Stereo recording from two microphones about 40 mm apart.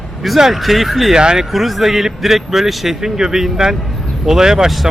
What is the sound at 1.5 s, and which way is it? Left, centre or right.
Speech, centre.